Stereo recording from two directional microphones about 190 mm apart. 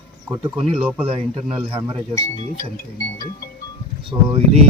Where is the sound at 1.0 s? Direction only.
30° right (ahead or behind).